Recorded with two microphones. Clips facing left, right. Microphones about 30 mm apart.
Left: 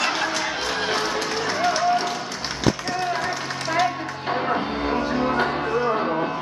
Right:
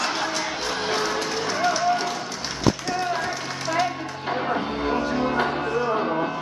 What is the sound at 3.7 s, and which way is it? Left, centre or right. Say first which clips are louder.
Music: left 2 dB; centre.